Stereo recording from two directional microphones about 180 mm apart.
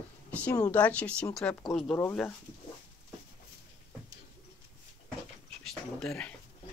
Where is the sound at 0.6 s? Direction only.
10° left (ahead or behind).